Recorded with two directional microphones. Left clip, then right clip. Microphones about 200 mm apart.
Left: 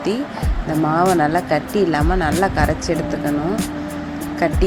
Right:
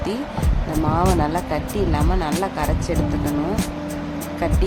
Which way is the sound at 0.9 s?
20° left (ahead or behind).